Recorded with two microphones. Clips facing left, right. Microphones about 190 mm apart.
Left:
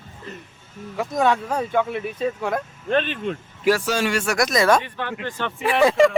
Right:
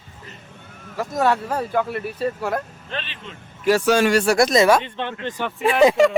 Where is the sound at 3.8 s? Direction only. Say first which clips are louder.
Right 6 dB; 60° right (ahead or behind).